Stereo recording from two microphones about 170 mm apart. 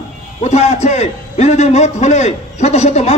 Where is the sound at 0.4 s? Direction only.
40° left (ahead or behind).